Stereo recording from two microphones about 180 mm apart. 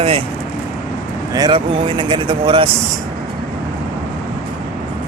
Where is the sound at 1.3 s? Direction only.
25° right (ahead or behind).